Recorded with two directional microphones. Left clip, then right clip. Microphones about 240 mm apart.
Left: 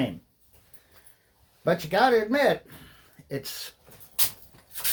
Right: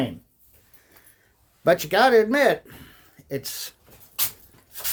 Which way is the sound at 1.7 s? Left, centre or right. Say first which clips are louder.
Right 4 dB; right.